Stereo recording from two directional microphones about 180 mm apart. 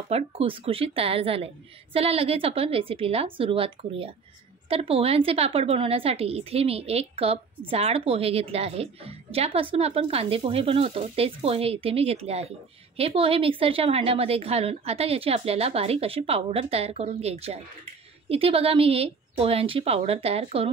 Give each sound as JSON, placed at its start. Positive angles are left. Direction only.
{"t": 0.1, "sound": "a woman's voice", "side_deg": -30}